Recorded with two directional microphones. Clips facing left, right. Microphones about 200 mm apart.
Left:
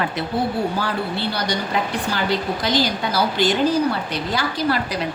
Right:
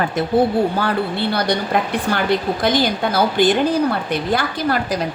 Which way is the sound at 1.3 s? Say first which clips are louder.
Right 6 dB; 55° right (ahead or behind).